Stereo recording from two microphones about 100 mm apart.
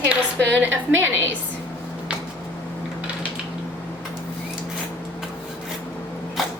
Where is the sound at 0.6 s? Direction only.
20° right (ahead or behind).